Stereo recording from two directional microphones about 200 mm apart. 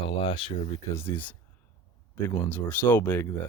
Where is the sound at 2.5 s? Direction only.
10° left (ahead or behind).